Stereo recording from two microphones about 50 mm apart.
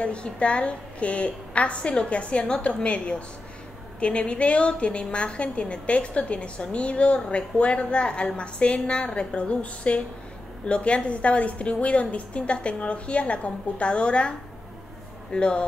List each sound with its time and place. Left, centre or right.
0.0 s a woman's voice: left
15.3 s a woman's voice: left